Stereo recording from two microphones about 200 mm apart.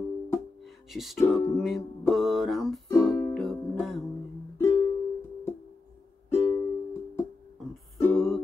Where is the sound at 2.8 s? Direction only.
15° left (ahead or behind).